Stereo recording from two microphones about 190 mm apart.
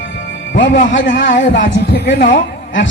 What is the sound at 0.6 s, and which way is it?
A man's voice, 75° left (ahead or behind).